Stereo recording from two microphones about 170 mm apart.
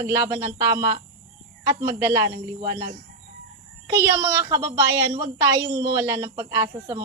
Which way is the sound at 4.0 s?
15° right (ahead or behind).